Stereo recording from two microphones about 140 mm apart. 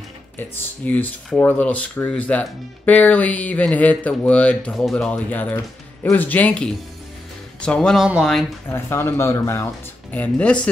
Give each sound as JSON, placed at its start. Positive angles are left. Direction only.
{"t": 0.4, "sound": "speech", "side_deg": 15}
{"t": 8.6, "sound": "speech", "side_deg": 15}
{"t": 10.1, "sound": "speech", "side_deg": 10}